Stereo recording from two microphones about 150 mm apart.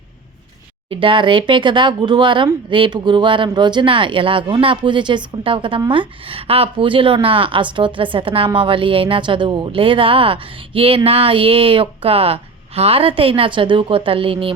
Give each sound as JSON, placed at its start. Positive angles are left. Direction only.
{"t": 0.9, "sound": "speech", "side_deg": -35}